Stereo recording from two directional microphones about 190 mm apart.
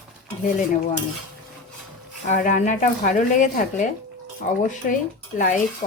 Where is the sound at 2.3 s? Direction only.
40° left (ahead or behind).